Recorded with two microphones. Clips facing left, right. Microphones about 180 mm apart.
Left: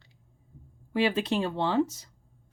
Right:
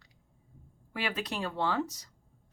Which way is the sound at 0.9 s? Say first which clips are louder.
Left 9 dB; 25° left (ahead or behind).